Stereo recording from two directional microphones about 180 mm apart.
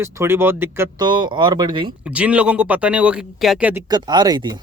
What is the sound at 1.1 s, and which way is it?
Speech, 25° right (ahead or behind).